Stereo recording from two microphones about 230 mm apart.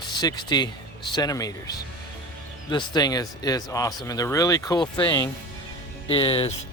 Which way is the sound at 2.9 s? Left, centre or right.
Centre.